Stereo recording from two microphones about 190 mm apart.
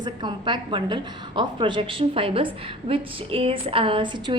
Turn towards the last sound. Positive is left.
turn(degrees=-25)  # may be behind; listen again after turning